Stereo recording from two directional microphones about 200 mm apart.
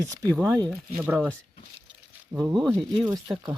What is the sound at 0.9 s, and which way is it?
Speech, 5° right (ahead or behind).